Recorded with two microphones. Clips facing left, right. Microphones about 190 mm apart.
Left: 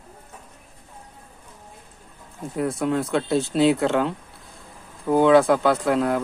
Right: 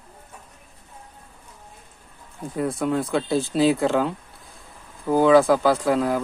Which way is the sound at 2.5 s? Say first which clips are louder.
Even; centre (ahead or behind).